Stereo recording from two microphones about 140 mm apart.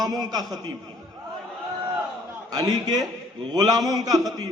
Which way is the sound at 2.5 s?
30° right (ahead or behind).